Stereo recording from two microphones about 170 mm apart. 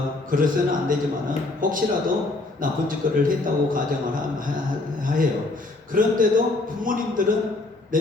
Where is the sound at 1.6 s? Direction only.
55° right (ahead or behind).